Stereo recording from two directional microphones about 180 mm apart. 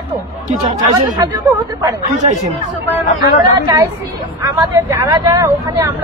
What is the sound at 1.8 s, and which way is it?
Speech, 15° right (ahead or behind).